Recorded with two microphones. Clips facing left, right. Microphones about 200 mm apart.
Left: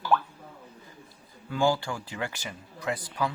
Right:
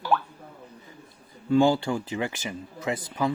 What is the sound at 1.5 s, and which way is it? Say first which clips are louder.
Speech: right 6 dB; 20° right (ahead or behind).